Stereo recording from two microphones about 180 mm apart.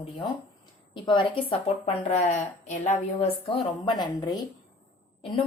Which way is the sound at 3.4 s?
25° left (ahead or behind).